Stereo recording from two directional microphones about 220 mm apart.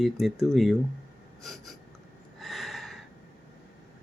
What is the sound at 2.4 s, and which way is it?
Gasp, centre (ahead or behind).